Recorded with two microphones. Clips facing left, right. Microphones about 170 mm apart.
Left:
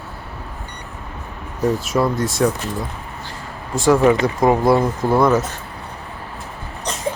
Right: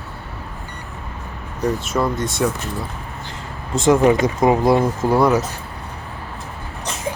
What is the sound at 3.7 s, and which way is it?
Speech, 20° right (ahead or behind).